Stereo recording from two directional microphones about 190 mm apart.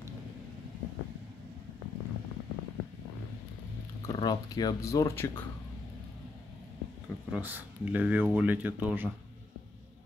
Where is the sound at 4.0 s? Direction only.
20° left (ahead or behind).